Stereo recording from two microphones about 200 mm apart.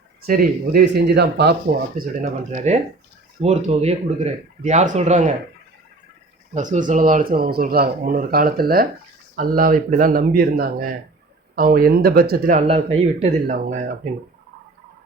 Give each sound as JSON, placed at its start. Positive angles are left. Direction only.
{"t": 0.3, "sound": "speech", "side_deg": -50}
{"t": 2.0, "sound": "speech", "side_deg": -35}
{"t": 6.5, "sound": "speech", "side_deg": -40}
{"t": 12.6, "sound": "speech", "side_deg": -30}